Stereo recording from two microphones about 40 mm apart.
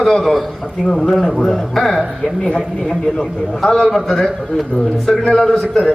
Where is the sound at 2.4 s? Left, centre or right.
Centre.